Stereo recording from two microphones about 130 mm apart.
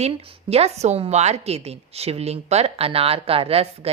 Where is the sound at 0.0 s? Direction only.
50° right (ahead or behind).